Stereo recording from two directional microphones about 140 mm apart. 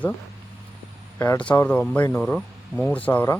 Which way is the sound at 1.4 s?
10° left (ahead or behind).